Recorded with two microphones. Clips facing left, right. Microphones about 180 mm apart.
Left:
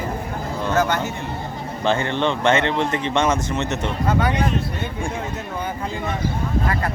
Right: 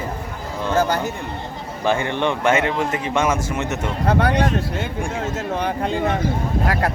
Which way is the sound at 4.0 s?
65° right (ahead or behind).